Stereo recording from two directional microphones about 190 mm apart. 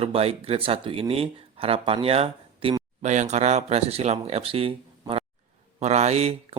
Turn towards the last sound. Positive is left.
turn(degrees=-35)  # may be behind; listen again after turning